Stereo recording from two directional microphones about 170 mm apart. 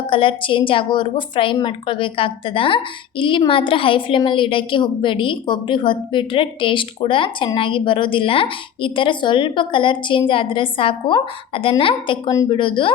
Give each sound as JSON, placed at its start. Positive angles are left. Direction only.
{"t": 0.1, "sound": "a woman's voice", "side_deg": 30}